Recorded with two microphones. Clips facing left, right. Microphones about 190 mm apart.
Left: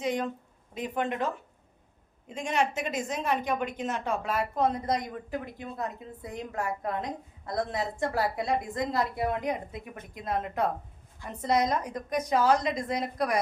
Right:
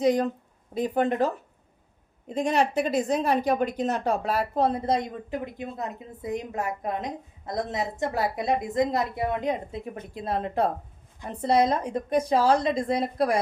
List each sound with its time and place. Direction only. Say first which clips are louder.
0.0 s a woman's voice: right 7 dB; 35° right (ahead or behind)